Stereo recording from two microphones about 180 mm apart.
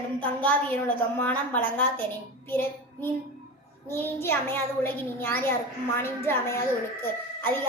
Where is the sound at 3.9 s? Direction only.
15° left (ahead or behind).